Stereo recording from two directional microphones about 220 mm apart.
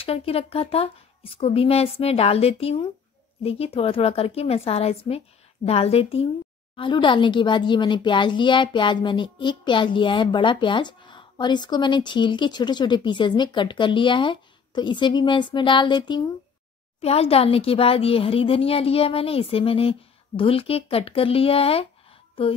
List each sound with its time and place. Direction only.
0.0 s a woman's voice: 25° left (ahead or behind)